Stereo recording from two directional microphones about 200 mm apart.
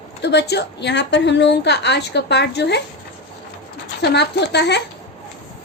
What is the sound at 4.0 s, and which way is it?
Speech, 55° left (ahead or behind).